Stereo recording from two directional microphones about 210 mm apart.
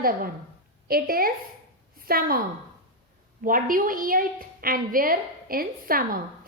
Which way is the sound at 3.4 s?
40° right (ahead or behind).